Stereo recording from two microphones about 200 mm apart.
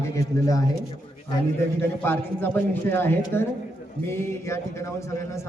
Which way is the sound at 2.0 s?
10° left (ahead or behind).